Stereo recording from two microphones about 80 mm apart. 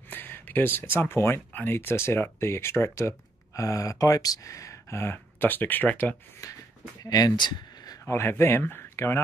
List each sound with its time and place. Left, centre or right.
0.1 s speech: left
6.4 s a sound: left
7.0 s speech: left
8.0 s a man's voice: left